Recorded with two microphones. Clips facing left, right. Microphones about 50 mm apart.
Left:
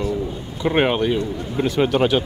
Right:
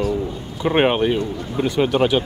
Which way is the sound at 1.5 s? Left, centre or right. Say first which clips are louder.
Even; centre.